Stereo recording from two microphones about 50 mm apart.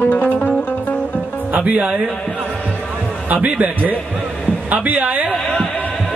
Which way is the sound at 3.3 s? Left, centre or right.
Right.